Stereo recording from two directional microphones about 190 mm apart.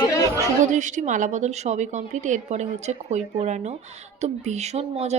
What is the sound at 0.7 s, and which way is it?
A woman's voice, 40° right (ahead or behind).